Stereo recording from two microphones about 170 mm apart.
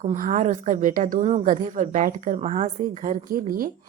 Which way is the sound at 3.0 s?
55° right (ahead or behind).